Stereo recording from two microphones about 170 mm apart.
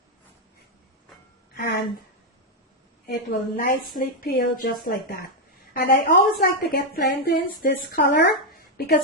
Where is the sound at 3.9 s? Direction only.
65° left (ahead or behind).